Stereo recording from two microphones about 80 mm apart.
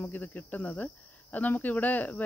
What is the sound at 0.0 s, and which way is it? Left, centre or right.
Speech, left.